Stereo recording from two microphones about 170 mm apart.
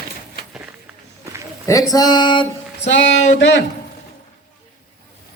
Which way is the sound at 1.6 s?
20° left (ahead or behind).